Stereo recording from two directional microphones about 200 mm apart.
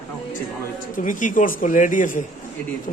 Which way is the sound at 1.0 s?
40° left (ahead or behind).